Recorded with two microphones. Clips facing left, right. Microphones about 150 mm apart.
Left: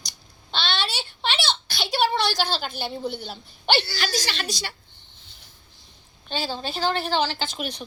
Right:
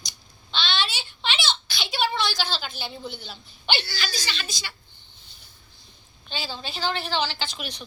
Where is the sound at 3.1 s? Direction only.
55° left (ahead or behind).